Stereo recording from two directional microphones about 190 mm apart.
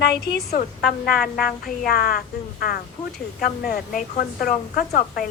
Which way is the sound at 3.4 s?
50° left (ahead or behind).